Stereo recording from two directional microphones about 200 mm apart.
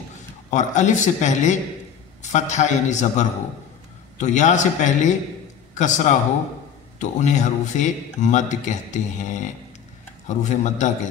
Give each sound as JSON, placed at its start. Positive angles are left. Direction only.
{"t": 0.5, "sound": "a man's voice", "side_deg": 35}